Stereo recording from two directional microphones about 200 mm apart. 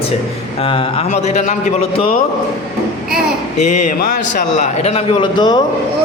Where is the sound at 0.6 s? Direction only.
30° left (ahead or behind).